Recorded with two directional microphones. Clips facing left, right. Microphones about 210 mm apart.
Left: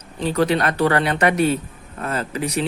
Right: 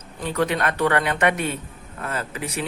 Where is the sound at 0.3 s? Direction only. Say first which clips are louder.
Left 3 dB; 35° left (ahead or behind).